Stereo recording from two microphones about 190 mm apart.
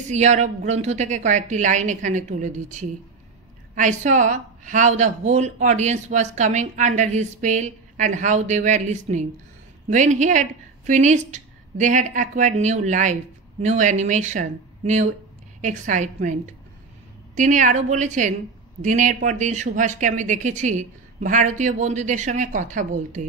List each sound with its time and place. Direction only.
0.1 s a woman's voice: 35° right (ahead or behind)